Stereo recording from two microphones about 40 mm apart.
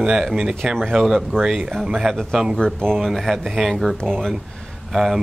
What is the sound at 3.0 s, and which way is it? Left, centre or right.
Speech, centre.